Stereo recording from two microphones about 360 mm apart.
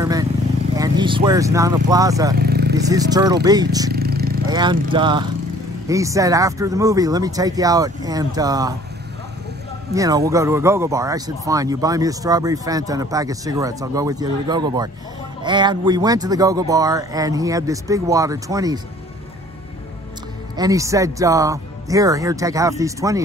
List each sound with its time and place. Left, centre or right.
0.0 s vehicle: centre
0.7 s speech: centre
2.3 s vehicle: right
2.9 s speech: centre
3.9 s vehicle: right
4.5 s speech: centre
9.9 s speech: centre
20.5 s speech: centre